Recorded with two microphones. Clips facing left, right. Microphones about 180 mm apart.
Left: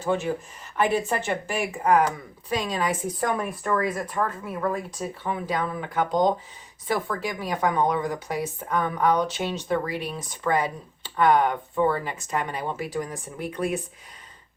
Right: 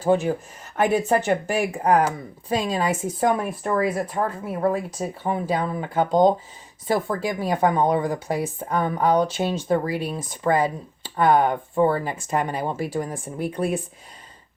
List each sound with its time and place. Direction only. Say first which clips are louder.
0.0 s speech: right 5 dB; 40° right (ahead or behind)